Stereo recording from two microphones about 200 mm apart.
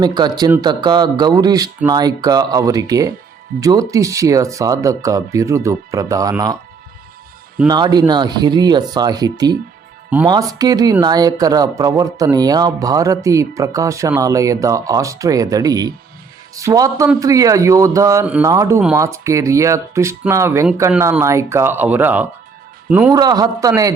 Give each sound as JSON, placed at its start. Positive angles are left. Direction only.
{"t": 0.0, "sound": "speech", "side_deg": -20}
{"t": 7.7, "sound": "a man's voice", "side_deg": -20}
{"t": 23.1, "sound": "speech", "side_deg": -20}